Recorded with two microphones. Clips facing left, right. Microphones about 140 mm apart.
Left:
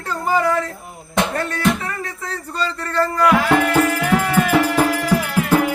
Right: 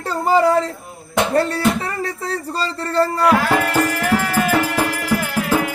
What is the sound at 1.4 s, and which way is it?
Speech, 30° right (ahead or behind).